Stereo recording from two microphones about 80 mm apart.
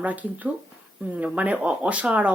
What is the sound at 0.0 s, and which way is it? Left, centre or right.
Speech, centre.